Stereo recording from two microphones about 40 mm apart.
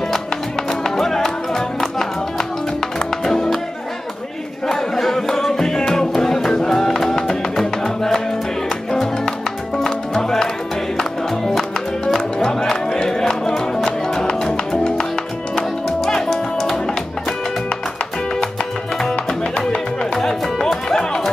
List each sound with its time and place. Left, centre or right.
0.7 s music: centre
4.6 s music: centre
18.9 s music: centre
20.2 s music: centre